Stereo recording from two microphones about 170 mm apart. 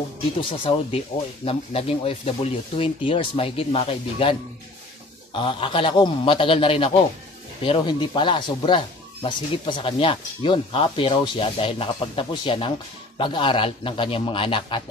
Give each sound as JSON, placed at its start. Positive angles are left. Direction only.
{"t": 0.4, "sound": "speech", "side_deg": 30}